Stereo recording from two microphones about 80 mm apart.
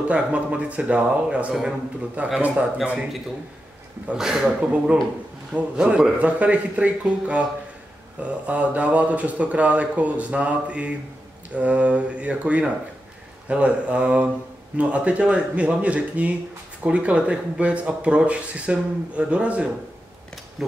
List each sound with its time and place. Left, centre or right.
0.1 s speech: centre
4.1 s speech: centre